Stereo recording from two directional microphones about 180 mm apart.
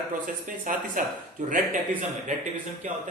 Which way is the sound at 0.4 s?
50° right (ahead or behind).